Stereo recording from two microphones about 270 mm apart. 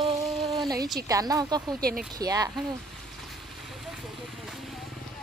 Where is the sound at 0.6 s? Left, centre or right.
Centre.